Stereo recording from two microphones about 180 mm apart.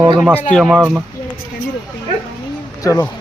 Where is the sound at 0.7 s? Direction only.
5° right (ahead or behind).